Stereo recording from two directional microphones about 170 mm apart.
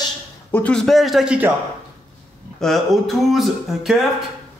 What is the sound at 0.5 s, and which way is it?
Speech, 10° left (ahead or behind).